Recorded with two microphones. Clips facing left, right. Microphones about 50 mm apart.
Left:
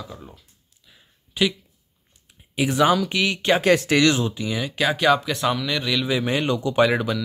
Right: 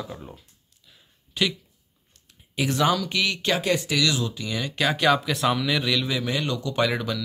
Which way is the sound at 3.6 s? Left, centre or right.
Left.